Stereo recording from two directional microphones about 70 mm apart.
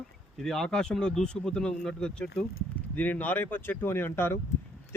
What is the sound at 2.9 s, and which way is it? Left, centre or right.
Speech, left.